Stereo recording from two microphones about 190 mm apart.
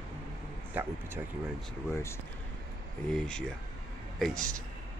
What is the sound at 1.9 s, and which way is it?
Speech, 15° left (ahead or behind).